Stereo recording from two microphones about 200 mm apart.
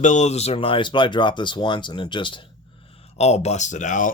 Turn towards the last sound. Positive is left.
turn(degrees=40)  # may be behind; listen again after turning